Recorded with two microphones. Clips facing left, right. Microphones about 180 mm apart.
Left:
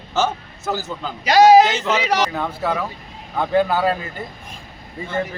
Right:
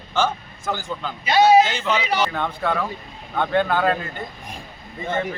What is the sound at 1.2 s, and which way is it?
Speech, 90° left.